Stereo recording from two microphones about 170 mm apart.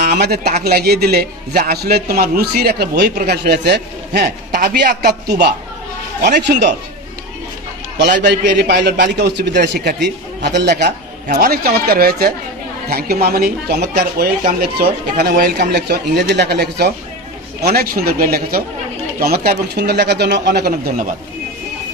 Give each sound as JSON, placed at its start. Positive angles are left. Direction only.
{"t": 0.0, "sound": "a man's voice", "side_deg": -70}
{"t": 6.4, "sound": "a man's voice", "side_deg": -90}
{"t": 8.2, "sound": "a man's voice", "side_deg": -75}
{"t": 11.2, "sound": "speech", "side_deg": -60}
{"t": 15.3, "sound": "a man's voice", "side_deg": -60}